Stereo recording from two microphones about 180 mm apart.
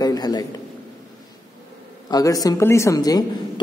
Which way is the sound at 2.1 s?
20° left (ahead or behind).